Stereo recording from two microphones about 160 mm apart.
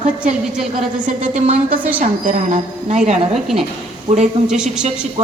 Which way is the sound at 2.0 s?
55° right (ahead or behind).